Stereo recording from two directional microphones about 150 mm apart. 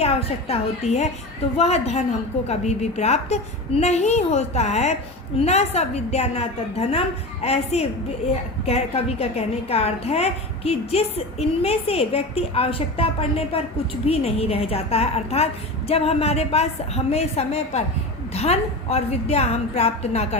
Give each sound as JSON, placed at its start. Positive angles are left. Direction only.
{"t": 0.0, "sound": "a woman's voice", "side_deg": 40}